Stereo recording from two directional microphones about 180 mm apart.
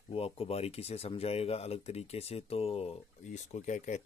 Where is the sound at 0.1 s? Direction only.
30° left (ahead or behind).